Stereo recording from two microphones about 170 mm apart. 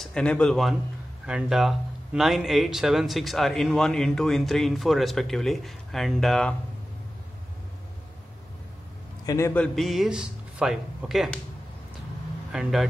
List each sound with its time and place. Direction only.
0.0 s speech: 5° left (ahead or behind)
9.2 s a man's voice: 20° left (ahead or behind)
9.5 s speech: 5° left (ahead or behind)
12.5 s speech: 5° right (ahead or behind)